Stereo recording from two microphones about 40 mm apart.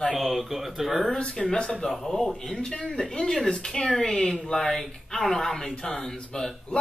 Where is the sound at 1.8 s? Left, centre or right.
Centre.